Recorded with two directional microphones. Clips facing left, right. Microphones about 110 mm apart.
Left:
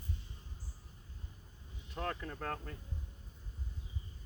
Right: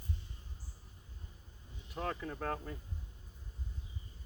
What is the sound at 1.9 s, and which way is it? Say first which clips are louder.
Speech: right 1 dB; 5° right (ahead or behind).